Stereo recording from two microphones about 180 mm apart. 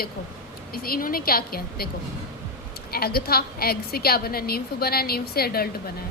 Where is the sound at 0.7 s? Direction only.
55° left (ahead or behind).